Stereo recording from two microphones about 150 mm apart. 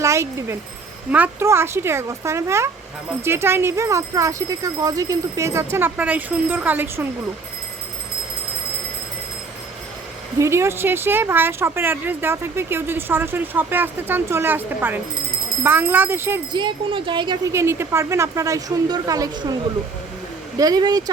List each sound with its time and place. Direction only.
0.0 s a woman's voice: 20° right (ahead or behind)
10.3 s speech: 20° right (ahead or behind)
16.5 s speech: 30° right (ahead or behind)
17.5 s a woman's voice: 15° right (ahead or behind)
20.6 s a woman's voice: 25° right (ahead or behind)